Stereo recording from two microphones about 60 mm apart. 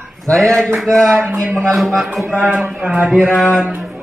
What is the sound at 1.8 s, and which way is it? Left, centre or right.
Speech, centre.